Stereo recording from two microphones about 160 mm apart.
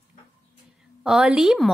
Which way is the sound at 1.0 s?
5° right (ahead or behind).